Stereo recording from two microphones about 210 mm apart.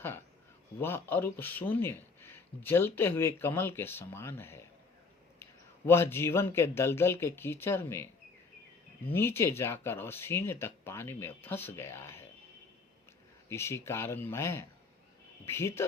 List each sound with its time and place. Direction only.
0.8 s speech: 10° left (ahead or behind)
9.1 s speech: 10° left (ahead or behind)
13.5 s speech: 10° left (ahead or behind)